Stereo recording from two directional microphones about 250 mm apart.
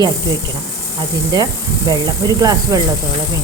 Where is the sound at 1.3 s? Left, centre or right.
Centre.